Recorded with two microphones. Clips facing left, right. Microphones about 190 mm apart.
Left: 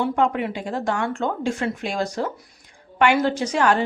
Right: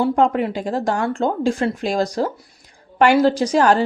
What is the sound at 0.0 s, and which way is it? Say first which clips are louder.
A woman's voice: right 4 dB; 35° right (ahead or behind).